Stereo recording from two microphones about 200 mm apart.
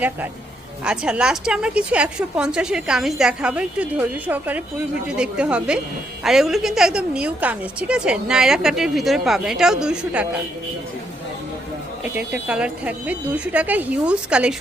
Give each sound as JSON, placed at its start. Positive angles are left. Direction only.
{"t": 0.9, "sound": "a woman's voice", "side_deg": -5}
{"t": 12.1, "sound": "speech", "side_deg": -5}